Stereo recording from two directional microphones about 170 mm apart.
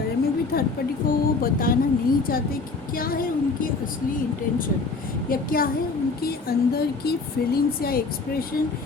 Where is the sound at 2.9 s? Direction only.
55° left (ahead or behind).